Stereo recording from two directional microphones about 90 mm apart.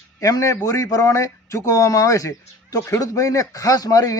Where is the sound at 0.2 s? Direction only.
40° left (ahead or behind).